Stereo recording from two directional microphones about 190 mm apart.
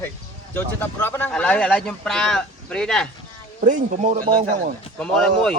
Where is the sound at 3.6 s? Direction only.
40° right (ahead or behind).